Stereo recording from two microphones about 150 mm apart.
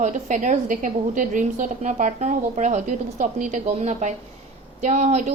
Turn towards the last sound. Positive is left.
turn(degrees=-50)  # may be behind; listen again after turning